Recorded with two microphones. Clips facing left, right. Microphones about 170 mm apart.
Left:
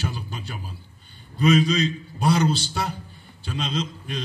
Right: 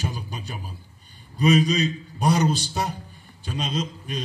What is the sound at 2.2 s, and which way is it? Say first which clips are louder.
A man's voice: even; 15° right (ahead or behind).